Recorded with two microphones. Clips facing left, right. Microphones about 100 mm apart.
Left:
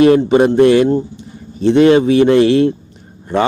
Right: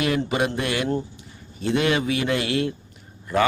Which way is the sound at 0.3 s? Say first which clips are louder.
Left 15 dB; 35° left (ahead or behind).